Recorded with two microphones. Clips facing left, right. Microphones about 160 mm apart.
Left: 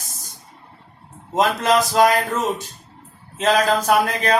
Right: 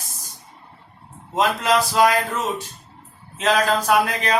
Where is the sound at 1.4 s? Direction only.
40° left (ahead or behind).